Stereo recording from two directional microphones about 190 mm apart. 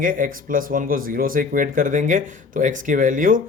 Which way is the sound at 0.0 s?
45° right (ahead or behind).